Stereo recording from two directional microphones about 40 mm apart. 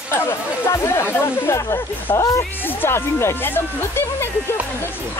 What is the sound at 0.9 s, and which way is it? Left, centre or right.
Speech, left.